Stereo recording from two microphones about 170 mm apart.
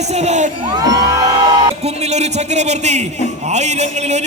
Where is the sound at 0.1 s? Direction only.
40° right (ahead or behind).